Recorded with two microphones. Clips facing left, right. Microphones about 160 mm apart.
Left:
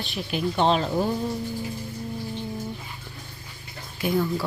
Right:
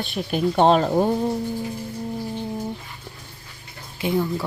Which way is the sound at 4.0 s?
20° right (ahead or behind).